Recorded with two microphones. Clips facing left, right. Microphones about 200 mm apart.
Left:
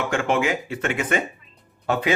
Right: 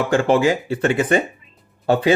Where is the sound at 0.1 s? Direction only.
35° right (ahead or behind).